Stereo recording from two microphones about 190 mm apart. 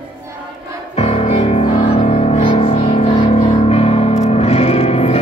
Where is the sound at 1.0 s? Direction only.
35° left (ahead or behind).